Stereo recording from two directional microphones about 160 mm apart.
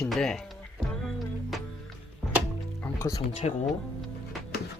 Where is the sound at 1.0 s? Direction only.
Centre (ahead or behind).